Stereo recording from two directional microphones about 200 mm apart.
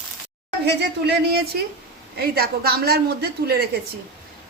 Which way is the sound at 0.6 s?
55° right (ahead or behind).